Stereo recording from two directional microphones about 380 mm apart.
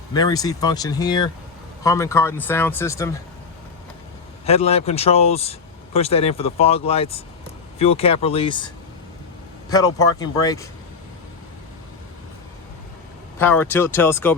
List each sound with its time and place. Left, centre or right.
0.1 s speech: centre
4.4 s speech: centre
13.4 s speech: centre